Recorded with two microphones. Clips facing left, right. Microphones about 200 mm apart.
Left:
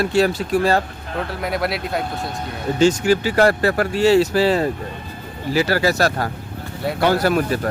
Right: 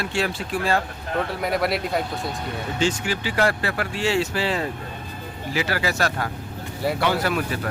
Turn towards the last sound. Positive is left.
turn(degrees=40)  # may be behind; listen again after turning